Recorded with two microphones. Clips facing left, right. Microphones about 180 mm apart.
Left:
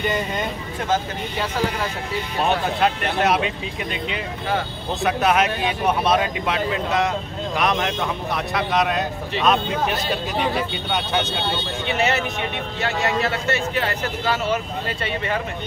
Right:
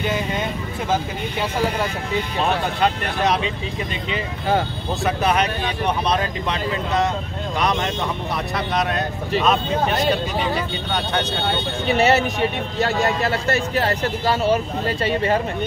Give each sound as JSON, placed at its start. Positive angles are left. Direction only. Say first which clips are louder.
{"t": 2.8, "sound": "speech", "louder": "even", "side_deg": 5}
{"t": 11.9, "sound": "speech", "louder": "right 5 dB", "side_deg": -35}